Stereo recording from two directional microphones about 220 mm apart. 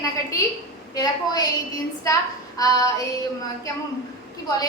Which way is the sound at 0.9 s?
15° left (ahead or behind).